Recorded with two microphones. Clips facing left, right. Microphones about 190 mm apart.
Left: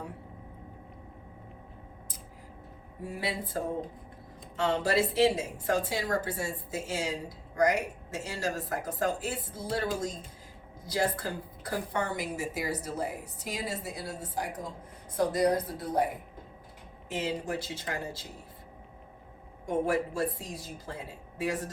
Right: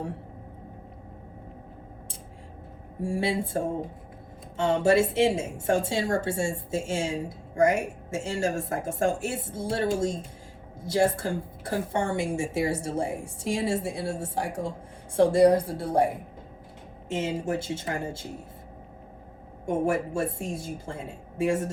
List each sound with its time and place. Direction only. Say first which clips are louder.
3.0 s a woman's voice: right 8 dB; 25° right (ahead or behind)
19.6 s a woman's voice: right 3 dB; 25° right (ahead or behind)